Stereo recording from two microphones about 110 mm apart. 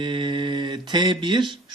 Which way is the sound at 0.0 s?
45° right (ahead or behind).